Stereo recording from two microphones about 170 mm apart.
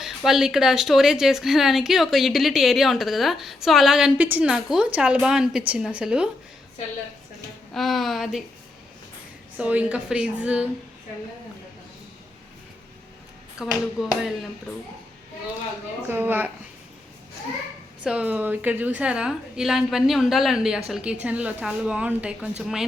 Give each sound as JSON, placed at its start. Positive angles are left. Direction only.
{"t": 0.0, "sound": "speech", "side_deg": 0}
{"t": 7.7, "sound": "speech", "side_deg": 0}
{"t": 9.6, "sound": "a woman's voice", "side_deg": -5}
{"t": 13.6, "sound": "speech", "side_deg": -5}
{"t": 16.0, "sound": "a woman's voice", "side_deg": -10}
{"t": 18.0, "sound": "speech", "side_deg": -5}